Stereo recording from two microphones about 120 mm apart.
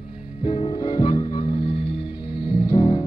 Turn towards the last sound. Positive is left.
turn(degrees=35)  # may be behind; listen again after turning